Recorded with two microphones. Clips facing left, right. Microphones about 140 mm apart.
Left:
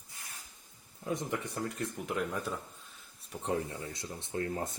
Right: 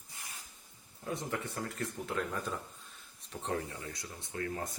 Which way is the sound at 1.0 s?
15° left (ahead or behind).